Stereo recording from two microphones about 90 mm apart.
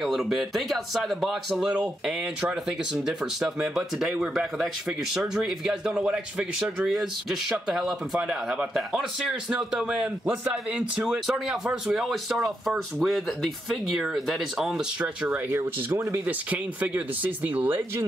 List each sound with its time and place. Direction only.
0.0 s speech: centre (ahead or behind)
15.0 s speech: 15° right (ahead or behind)
15.5 s speech: 30° right (ahead or behind)
16.3 s speech: 15° right (ahead or behind)